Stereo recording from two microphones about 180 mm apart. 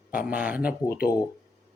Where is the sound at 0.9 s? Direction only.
55° left (ahead or behind).